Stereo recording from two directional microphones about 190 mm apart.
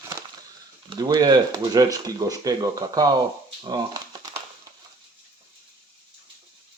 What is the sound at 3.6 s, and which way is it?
Typewriter, 25° right (ahead or behind).